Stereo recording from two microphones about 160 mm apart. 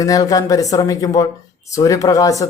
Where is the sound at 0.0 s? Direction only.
20° left (ahead or behind).